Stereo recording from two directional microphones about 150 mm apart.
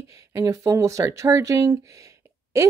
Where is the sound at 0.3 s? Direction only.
20° right (ahead or behind).